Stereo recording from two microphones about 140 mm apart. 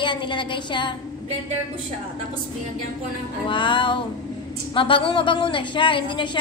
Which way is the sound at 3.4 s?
35° left (ahead or behind).